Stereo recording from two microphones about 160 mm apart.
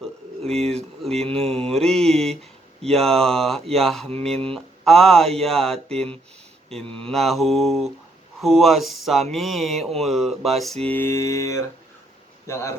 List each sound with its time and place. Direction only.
1.0 s mantra: 5° left (ahead or behind); by 11.6 s 20° left (ahead or behind)
12.5 s speech: 15° left (ahead or behind)